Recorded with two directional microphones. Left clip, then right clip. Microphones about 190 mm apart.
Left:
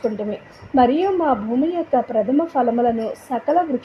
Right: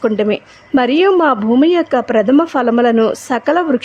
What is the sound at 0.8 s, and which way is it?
A woman's voice, 35° right (ahead or behind).